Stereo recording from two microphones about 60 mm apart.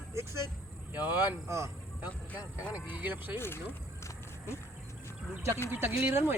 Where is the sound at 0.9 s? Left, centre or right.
Right.